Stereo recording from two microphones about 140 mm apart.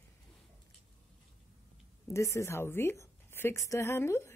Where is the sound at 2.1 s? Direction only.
20° left (ahead or behind).